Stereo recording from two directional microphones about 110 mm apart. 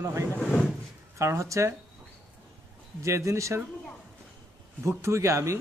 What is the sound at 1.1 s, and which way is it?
Speech, 25° right (ahead or behind).